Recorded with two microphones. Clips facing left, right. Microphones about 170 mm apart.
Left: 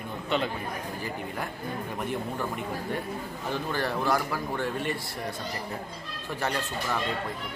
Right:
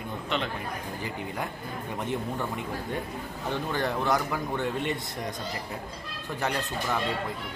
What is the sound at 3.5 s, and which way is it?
A man's voice, 20° right (ahead or behind).